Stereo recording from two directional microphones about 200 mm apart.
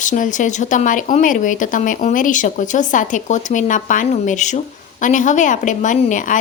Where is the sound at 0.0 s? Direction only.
40° left (ahead or behind).